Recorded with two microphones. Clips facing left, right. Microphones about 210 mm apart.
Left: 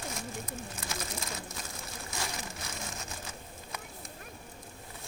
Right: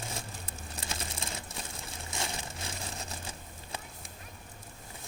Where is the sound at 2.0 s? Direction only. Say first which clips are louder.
Right 1 dB; 25° right (ahead or behind).